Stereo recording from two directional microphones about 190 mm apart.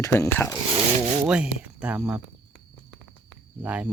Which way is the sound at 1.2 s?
5° right (ahead or behind).